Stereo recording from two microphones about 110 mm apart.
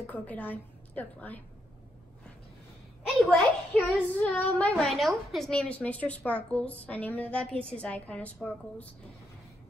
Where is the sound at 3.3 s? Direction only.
5° left (ahead or behind).